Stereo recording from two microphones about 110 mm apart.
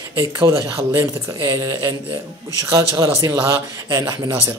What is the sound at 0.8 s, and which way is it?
Speech, 30° right (ahead or behind).